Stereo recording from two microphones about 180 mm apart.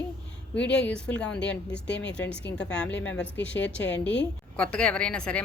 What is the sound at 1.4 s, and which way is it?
Speech, 75° left (ahead or behind).